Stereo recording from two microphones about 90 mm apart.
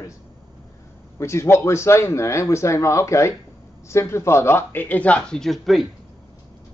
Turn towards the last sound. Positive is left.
turn(degrees=0)  # may be behind; listen again after turning